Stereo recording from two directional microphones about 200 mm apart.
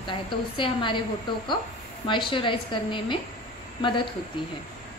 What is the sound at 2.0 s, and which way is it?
A woman's voice, 25° left (ahead or behind).